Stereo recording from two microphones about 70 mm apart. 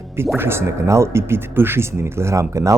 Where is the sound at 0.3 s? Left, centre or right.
Right.